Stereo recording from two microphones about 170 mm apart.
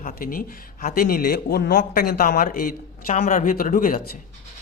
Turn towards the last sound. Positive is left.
turn(degrees=55)  # may be behind; listen again after turning